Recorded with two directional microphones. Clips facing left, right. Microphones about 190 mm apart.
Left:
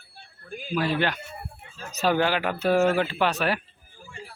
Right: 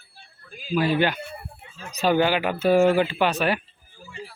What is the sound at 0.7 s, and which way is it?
Speech, 5° right (ahead or behind).